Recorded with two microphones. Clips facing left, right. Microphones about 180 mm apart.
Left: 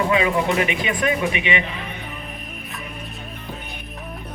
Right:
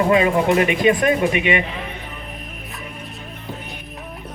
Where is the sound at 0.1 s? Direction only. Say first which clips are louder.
Right 4 dB; 45° right (ahead or behind).